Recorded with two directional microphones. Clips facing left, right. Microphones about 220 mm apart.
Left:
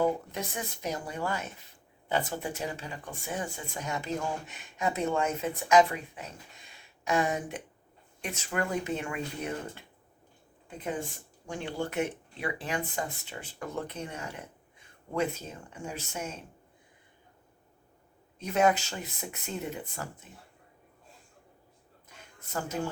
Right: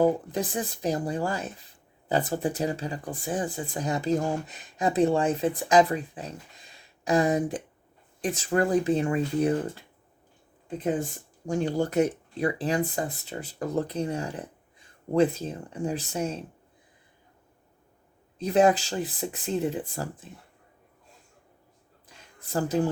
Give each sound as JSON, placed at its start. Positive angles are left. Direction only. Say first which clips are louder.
{"t": 0.0, "sound": "speech", "louder": "right 5 dB", "side_deg": -35}
{"t": 11.4, "sound": "speech", "louder": "right 8 dB", "side_deg": -40}
{"t": 18.3, "sound": "speech", "louder": "right 5 dB", "side_deg": -35}
{"t": 22.4, "sound": "speech", "louder": "right 8 dB", "side_deg": -35}